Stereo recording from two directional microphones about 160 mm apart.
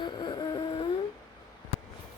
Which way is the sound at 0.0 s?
25° left (ahead or behind).